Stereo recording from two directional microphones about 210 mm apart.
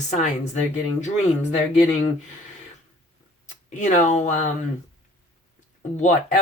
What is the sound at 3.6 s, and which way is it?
Speech, 35° left (ahead or behind).